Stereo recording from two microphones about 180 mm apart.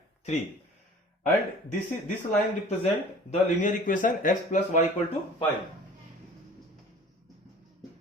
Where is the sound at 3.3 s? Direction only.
45° left (ahead or behind).